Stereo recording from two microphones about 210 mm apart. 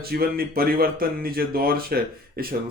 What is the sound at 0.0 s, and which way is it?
Speech, 45° right (ahead or behind).